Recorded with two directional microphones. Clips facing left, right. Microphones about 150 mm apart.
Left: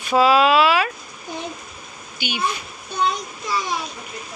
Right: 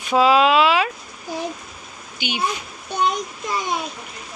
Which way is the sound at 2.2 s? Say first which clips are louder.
Right 1 dB; 20° right (ahead or behind).